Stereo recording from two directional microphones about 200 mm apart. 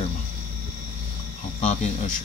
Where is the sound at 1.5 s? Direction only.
35° left (ahead or behind).